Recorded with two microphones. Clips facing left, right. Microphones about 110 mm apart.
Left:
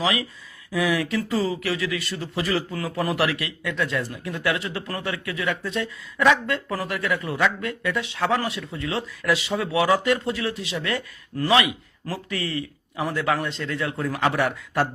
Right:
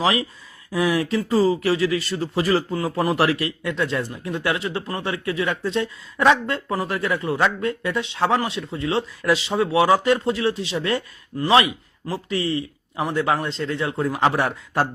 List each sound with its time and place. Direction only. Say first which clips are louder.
0.0 s speech: right 3 dB; 35° right (ahead or behind)